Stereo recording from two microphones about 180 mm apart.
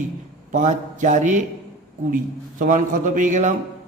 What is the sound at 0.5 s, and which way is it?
Speech, 45° right (ahead or behind).